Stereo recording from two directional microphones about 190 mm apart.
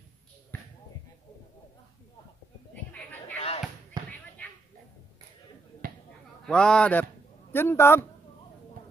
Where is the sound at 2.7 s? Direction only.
10° left (ahead or behind).